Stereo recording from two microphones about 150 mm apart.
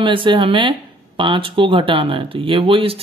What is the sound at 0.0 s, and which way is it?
Speech, 35° right (ahead or behind).